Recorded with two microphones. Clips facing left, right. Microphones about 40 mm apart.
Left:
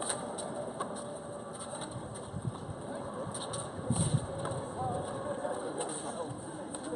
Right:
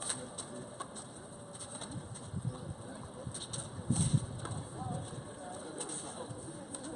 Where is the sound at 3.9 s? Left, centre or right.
Centre.